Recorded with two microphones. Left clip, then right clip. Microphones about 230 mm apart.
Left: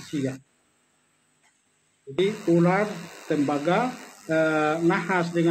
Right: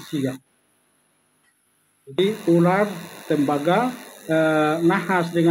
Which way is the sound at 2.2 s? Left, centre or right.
Right.